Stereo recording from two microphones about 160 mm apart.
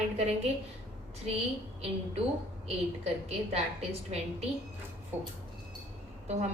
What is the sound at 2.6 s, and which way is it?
A woman's voice, 40° right (ahead or behind).